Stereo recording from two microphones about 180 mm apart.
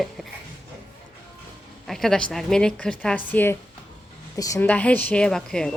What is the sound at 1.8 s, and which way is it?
A woman's voice, centre (ahead or behind).